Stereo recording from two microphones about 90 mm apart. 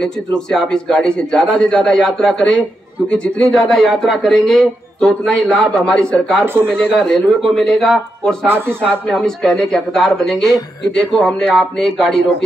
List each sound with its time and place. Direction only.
0.0 s a man's voice: 5° left (ahead or behind)
6.4 s speech: 25° right (ahead or behind)
6.7 s a man's voice: 10° left (ahead or behind)